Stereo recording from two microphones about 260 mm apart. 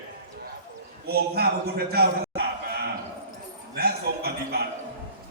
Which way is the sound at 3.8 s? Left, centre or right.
Right.